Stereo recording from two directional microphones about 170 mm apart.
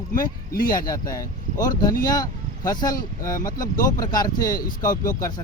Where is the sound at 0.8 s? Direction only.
20° left (ahead or behind).